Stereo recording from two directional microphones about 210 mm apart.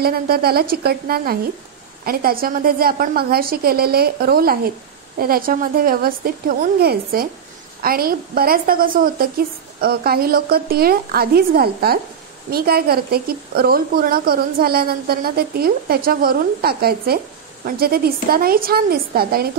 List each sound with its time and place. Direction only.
0.0 s a woman's voice: 45° right (ahead or behind)